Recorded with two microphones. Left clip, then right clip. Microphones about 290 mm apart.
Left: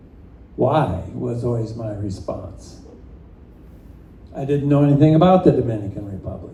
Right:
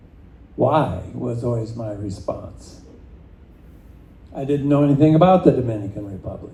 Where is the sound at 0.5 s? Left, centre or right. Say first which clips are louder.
Even; right.